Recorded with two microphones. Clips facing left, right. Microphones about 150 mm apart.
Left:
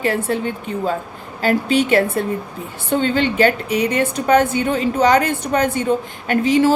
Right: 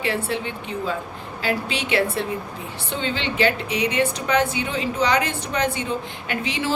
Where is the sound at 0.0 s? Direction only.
45° left (ahead or behind).